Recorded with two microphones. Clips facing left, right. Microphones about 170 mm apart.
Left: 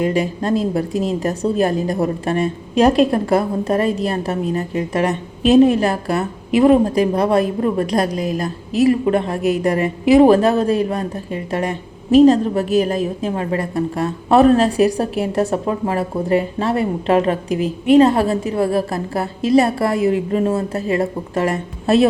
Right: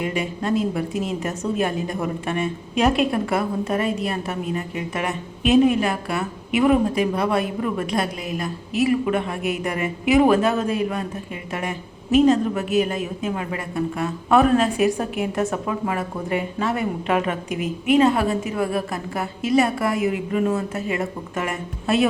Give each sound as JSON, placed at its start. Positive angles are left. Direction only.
{"t": 0.0, "sound": "a woman's voice", "side_deg": 35}